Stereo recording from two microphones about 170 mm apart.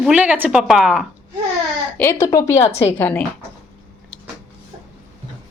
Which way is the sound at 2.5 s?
40° left (ahead or behind).